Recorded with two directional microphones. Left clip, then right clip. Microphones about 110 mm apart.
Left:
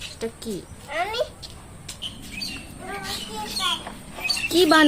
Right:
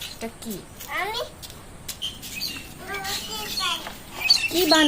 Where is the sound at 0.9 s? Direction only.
Centre (ahead or behind).